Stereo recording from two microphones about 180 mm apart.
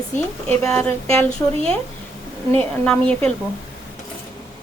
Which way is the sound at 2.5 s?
5° left (ahead or behind).